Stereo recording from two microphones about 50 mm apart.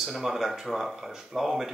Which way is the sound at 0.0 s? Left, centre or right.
Centre.